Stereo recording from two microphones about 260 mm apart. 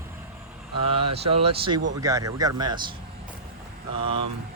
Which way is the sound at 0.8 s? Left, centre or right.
Right.